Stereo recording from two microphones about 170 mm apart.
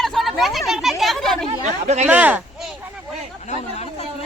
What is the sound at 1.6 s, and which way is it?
Speech, 40° right (ahead or behind).